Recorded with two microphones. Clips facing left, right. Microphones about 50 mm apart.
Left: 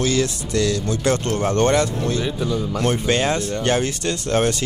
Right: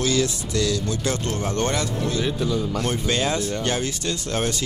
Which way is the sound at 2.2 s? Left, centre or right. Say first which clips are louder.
Left 1 dB; centre.